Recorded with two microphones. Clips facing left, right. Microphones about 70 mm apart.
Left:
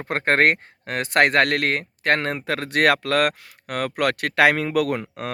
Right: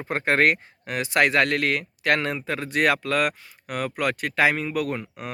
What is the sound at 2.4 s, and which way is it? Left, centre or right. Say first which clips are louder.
Speech: left 4 dB; left.